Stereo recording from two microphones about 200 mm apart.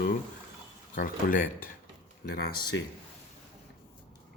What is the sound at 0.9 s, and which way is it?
Speech, 45° left (ahead or behind).